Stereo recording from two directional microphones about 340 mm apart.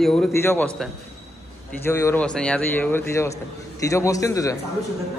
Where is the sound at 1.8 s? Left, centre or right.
Centre.